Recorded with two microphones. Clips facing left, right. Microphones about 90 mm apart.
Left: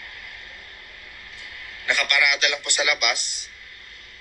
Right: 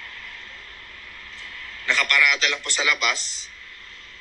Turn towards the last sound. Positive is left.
turn(degrees=60)  # may be behind; listen again after turning